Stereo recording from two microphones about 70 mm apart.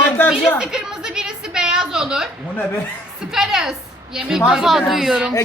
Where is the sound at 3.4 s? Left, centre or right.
Centre.